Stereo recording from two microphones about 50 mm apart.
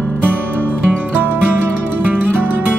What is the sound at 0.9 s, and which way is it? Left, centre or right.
Music, right.